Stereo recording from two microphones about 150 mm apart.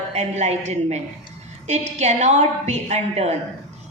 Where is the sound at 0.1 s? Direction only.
50° right (ahead or behind).